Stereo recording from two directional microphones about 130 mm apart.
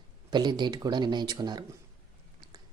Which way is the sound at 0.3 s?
35° right (ahead or behind).